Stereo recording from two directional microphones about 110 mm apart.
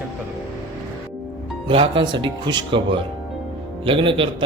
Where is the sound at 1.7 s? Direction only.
50° right (ahead or behind).